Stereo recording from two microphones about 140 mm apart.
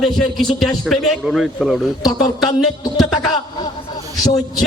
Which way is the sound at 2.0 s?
30° left (ahead or behind).